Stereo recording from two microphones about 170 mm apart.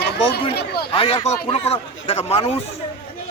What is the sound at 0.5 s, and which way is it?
Speech, 70° left (ahead or behind).